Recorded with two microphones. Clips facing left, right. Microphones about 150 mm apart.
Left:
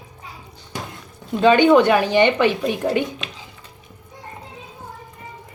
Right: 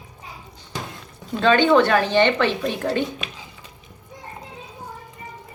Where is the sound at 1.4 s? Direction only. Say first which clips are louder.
Left 3 dB; 15° left (ahead or behind).